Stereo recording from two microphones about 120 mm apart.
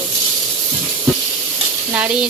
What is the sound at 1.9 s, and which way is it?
Speech, 10° right (ahead or behind).